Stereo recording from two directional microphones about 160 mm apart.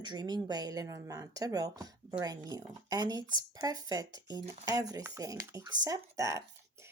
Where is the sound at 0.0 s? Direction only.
25° right (ahead or behind).